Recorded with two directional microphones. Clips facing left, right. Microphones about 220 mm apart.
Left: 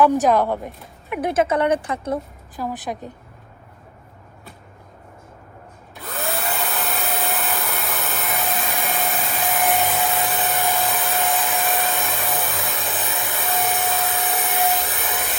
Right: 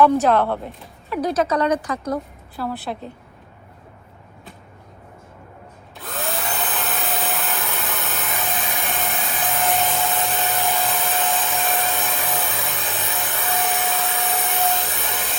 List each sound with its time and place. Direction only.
0.0 s speech: 15° left (ahead or behind)
1.1 s speech: 25° left (ahead or behind)
2.6 s speech: 15° left (ahead or behind)
6.0 s hair dryer: centre (ahead or behind)
11.3 s vacuum cleaner: centre (ahead or behind)
13.6 s a sound: centre (ahead or behind)